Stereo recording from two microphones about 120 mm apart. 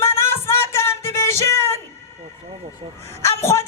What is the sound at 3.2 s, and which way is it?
Speech, 20° left (ahead or behind).